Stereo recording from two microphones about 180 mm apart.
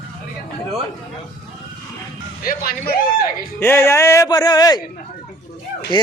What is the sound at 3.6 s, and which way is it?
A man's voice, 15° left (ahead or behind).